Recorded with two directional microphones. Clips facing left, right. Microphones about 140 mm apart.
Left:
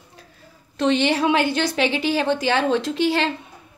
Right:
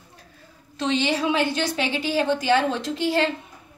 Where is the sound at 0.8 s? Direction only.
60° left (ahead or behind); by 3.3 s 80° left.